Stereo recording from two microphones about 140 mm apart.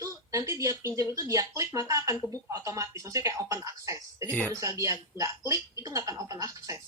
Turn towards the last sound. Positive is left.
turn(degrees=-25)  # may be behind; listen again after turning